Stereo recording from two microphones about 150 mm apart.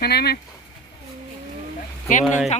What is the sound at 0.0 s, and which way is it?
Speech, 90° left.